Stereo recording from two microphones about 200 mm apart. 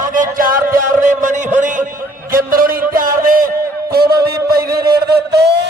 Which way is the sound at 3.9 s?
50° right (ahead or behind).